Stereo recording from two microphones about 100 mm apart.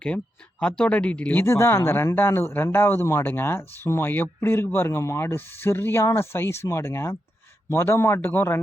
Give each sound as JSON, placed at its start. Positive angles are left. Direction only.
{"t": 0.6, "sound": "speech", "side_deg": 10}